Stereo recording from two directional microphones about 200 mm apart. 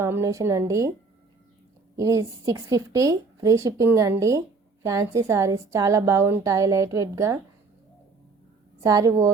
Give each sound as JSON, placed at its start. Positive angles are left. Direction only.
{"t": 0.0, "sound": "a woman's voice", "side_deg": -15}
{"t": 2.0, "sound": "a woman's voice", "side_deg": -15}
{"t": 8.8, "sound": "a woman's voice", "side_deg": -15}